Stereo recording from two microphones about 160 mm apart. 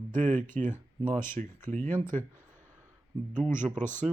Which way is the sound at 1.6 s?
10° left (ahead or behind).